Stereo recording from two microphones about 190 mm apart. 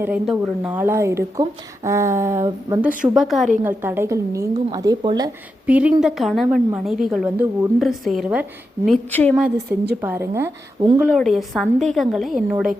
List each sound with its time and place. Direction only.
0.0 s a woman's voice: 5° right (ahead or behind)
3.0 s a woman's voice: centre (ahead or behind)
3.6 s a woman's voice: 10° right (ahead or behind)
5.6 s a woman's voice: 5° right (ahead or behind)
8.9 s a woman's voice: 10° left (ahead or behind)
9.3 s a woman's voice: 10° right (ahead or behind)
11.1 s a woman's voice: centre (ahead or behind)